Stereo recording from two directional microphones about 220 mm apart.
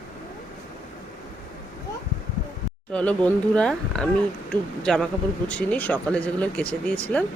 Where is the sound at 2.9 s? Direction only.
5° left (ahead or behind).